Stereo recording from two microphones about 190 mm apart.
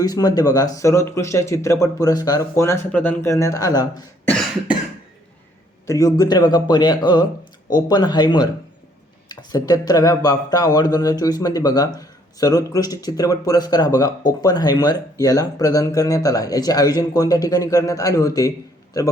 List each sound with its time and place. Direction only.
0.0 s speech: 20° left (ahead or behind)
5.8 s speech: 15° left (ahead or behind)